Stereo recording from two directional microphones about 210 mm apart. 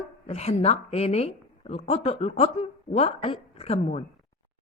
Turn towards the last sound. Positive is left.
turn(degrees=30)  # may be behind; listen again after turning